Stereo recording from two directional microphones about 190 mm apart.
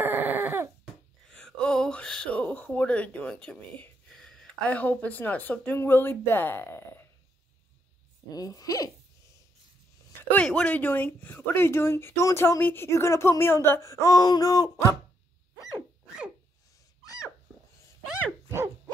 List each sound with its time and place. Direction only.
0.0 s dog: 10° right (ahead or behind)
1.3 s speech: 5° left (ahead or behind)
8.3 s speech: 20° left (ahead or behind)
10.3 s speech: 5° left (ahead or behind)